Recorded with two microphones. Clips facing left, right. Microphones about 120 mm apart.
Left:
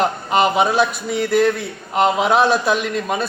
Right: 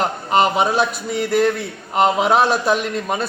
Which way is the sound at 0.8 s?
35° right (ahead or behind).